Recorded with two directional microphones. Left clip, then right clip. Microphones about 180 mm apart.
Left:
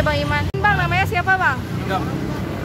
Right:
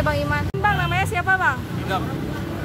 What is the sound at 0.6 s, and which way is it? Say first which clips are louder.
Speech: left 3 dB; centre (ahead or behind).